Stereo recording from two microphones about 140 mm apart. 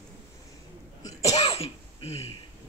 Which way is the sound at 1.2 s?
45° left (ahead or behind).